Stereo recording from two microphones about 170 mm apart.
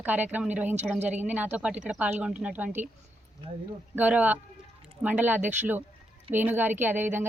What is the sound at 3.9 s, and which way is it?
A woman's voice, 10° right (ahead or behind).